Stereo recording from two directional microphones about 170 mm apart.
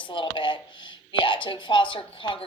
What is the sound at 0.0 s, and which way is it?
Speech, 30° left (ahead or behind).